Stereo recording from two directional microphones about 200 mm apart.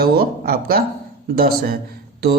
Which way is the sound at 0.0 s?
50° right (ahead or behind).